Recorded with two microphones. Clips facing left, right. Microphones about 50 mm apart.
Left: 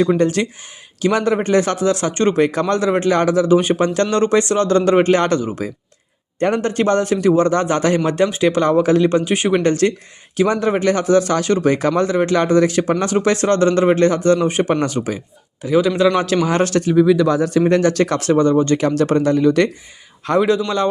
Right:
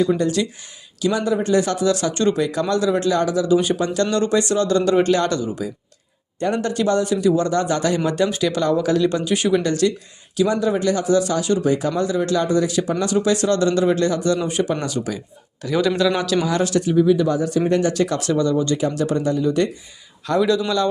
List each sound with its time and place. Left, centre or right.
0.0 s speech: left
9.5 s speech: left
15.6 s a man's voice: centre
16.0 s speech: left
16.9 s speech: left
18.8 s speech: left
20.2 s speech: left